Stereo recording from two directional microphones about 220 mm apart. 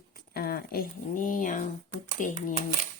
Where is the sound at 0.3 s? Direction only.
45° left (ahead or behind).